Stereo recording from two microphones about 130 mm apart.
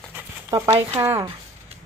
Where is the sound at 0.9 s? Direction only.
20° right (ahead or behind).